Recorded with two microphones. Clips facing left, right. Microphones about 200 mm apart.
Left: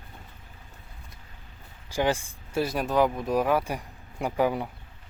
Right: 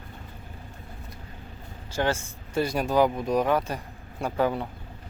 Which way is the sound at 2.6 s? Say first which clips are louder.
Right 2 dB; centre (ahead or behind).